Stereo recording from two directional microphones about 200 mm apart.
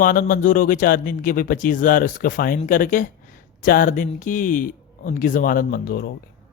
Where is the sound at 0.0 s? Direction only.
45° left (ahead or behind).